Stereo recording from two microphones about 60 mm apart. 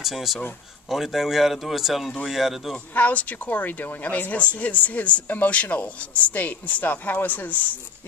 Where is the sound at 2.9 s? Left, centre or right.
Left.